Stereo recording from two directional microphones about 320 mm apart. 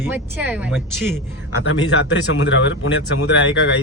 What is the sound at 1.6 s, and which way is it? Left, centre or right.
Speech, left.